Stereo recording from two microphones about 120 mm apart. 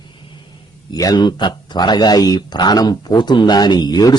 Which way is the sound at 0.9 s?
35° left (ahead or behind).